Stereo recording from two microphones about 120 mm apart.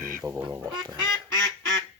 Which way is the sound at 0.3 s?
35° right (ahead or behind).